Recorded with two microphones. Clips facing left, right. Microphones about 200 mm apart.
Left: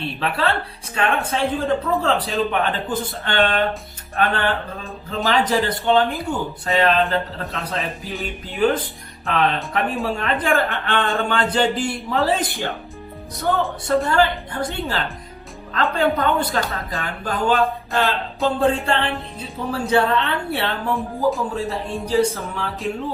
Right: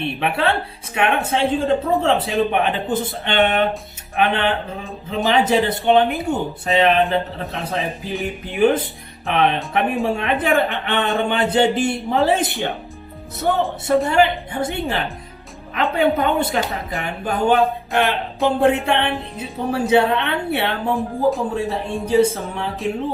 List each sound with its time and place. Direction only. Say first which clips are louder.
0.2 s a man's voice: right 1 dB; 20° right (ahead or behind)